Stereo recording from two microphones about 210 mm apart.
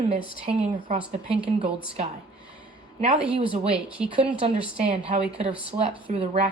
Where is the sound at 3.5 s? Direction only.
25° right (ahead or behind).